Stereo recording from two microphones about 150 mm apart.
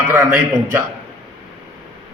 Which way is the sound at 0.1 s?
15° right (ahead or behind).